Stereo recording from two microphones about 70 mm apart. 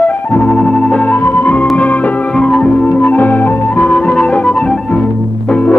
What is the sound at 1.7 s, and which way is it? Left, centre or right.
Organ, left.